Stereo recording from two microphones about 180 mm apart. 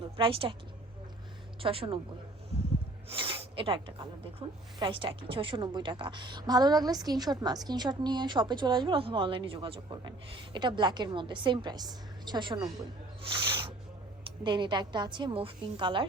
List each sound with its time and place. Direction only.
0.2 s a woman's voice: 30° right (ahead or behind)
1.6 s a woman's voice: 30° right (ahead or behind)
3.1 s speech: 30° right (ahead or behind)